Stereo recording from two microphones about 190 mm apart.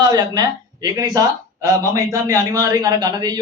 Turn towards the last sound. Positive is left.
turn(degrees=-20)  # may be behind; listen again after turning